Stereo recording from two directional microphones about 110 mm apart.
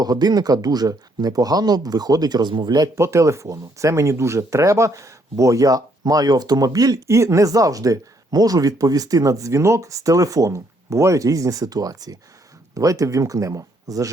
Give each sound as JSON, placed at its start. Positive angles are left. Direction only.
{"t": 0.0, "sound": "speech", "side_deg": -35}
{"t": 2.9, "sound": "speech", "side_deg": -25}